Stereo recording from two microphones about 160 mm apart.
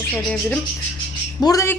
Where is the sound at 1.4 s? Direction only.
20° left (ahead or behind).